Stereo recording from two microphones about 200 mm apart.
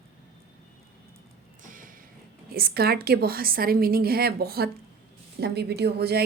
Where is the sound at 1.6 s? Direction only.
40° right (ahead or behind).